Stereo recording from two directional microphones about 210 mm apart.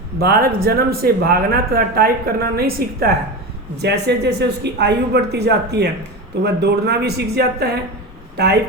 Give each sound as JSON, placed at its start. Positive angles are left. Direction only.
{"t": 0.2, "sound": "speech", "side_deg": -45}